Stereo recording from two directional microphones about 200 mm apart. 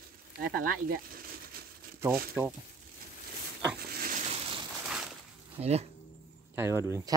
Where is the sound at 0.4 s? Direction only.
45° right (ahead or behind).